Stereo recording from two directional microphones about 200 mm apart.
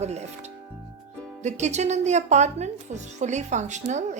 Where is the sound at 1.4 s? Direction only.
35° right (ahead or behind).